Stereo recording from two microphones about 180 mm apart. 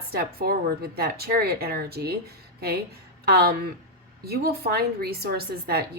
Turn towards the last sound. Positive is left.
turn(degrees=-60)  # may be behind; listen again after turning